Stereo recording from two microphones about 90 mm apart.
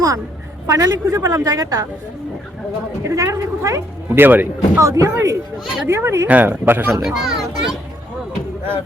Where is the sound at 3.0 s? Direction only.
35° right (ahead or behind).